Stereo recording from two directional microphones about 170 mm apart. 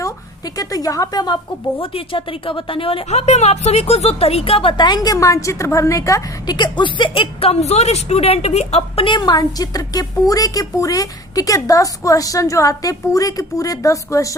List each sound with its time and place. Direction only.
0.0 s a woman's voice: 20° left (ahead or behind)